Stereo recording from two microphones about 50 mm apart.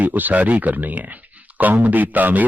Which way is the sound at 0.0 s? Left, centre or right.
Right.